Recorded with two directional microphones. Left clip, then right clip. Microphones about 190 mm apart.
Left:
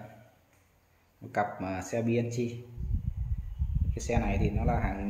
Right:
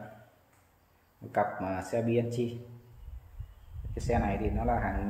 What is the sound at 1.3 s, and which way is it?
Speech, 20° left (ahead or behind).